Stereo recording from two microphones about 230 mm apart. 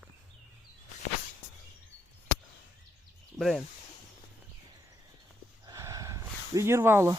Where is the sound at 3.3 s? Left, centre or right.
Centre.